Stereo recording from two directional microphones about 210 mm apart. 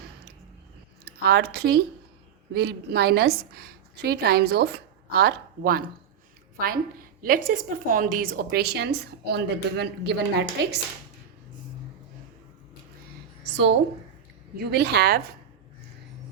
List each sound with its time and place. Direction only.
1.0 s a woman's voice: 50° right (ahead or behind)
7.2 s a woman's voice: 45° right (ahead or behind)
13.5 s a sound: 55° right (ahead or behind)
14.5 s a woman's voice: 50° right (ahead or behind)